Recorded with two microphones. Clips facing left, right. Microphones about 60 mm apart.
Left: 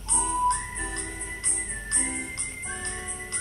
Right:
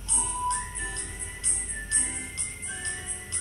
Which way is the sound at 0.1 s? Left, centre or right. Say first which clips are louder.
Left 5 dB; left.